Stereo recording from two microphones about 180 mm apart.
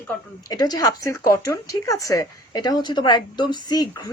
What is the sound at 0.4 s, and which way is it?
Speech, 20° left (ahead or behind).